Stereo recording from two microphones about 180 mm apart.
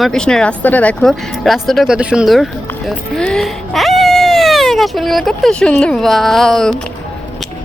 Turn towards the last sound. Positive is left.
turn(degrees=0)  # may be behind; listen again after turning